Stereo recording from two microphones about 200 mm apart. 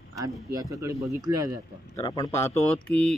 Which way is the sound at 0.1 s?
15° right (ahead or behind).